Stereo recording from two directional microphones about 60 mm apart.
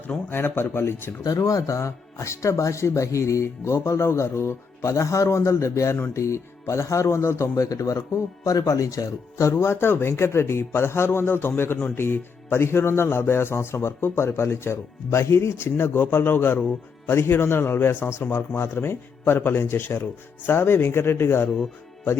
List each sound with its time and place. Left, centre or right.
0.3 s a man's voice: left
1.2 s speech: left
9.5 s a man's voice: left